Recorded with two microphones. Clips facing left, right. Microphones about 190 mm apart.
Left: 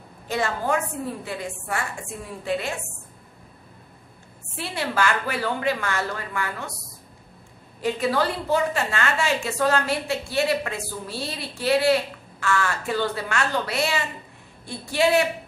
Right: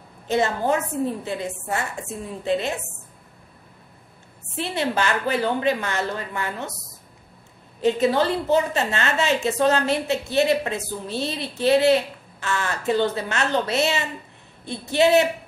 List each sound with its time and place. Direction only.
0.3 s a woman's voice: 20° right (ahead or behind)
4.6 s a woman's voice: 20° right (ahead or behind)
7.8 s a woman's voice: 25° right (ahead or behind)